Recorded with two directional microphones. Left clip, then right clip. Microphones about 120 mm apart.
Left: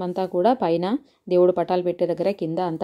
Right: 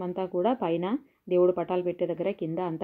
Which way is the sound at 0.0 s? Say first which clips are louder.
Left 7 dB; 35° left (ahead or behind).